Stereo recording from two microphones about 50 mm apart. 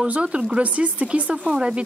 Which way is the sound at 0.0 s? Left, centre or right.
Right.